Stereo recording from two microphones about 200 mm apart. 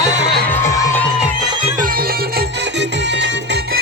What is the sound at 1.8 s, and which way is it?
Music, 50° right (ahead or behind).